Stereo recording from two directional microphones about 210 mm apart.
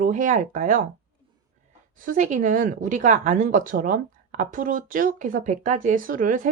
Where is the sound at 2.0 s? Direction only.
40° right (ahead or behind).